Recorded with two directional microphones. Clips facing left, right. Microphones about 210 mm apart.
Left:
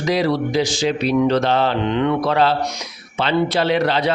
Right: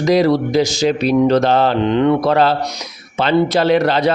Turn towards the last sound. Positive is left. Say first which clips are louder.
# right 4 dB
turn(degrees=-45)  # may be behind; listen again after turning